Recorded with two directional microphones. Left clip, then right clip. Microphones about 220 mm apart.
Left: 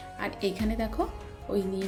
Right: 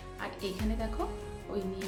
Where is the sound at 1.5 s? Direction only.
35° left (ahead or behind).